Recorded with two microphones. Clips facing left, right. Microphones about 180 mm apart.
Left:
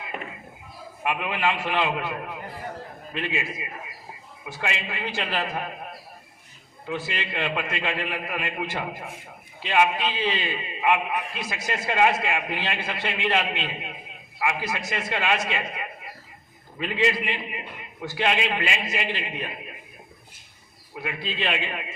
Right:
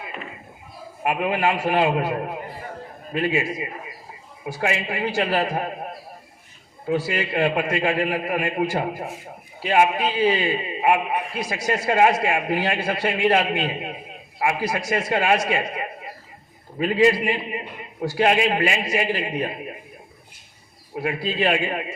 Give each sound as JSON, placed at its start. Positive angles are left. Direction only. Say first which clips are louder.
{"t": 1.0, "sound": "a man's voice", "louder": "right 4 dB", "side_deg": -40}
{"t": 20.9, "sound": "a man's voice", "louder": "right 7 dB", "side_deg": -40}